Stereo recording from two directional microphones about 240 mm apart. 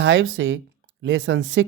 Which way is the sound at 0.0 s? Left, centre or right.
Right.